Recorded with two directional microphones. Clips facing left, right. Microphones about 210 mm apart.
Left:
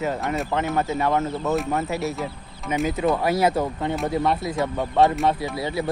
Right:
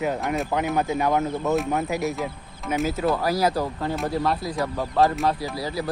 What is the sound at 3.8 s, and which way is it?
Speech, centre (ahead or behind).